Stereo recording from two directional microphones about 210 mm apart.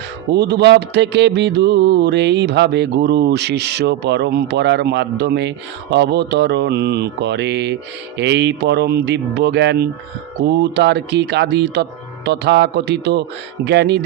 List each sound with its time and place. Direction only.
0.3 s speech: 55° right (ahead or behind)